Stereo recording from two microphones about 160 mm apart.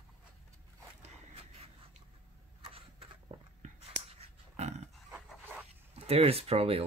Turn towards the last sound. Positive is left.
turn(degrees=-40)  # may be behind; listen again after turning